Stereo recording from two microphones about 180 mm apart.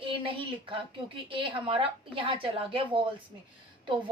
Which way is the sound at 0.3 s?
30° right (ahead or behind).